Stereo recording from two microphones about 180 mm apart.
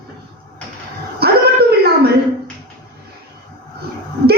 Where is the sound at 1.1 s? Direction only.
60° right (ahead or behind).